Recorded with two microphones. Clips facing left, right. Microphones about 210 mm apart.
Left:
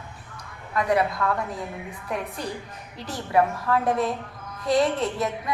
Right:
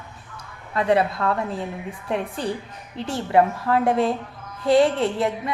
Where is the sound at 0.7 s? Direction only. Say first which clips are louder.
Right 3 dB; 30° right (ahead or behind).